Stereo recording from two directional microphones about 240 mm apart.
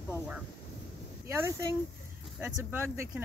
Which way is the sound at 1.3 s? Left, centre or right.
Centre.